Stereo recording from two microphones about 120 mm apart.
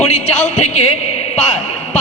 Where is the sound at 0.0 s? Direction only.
60° left (ahead or behind).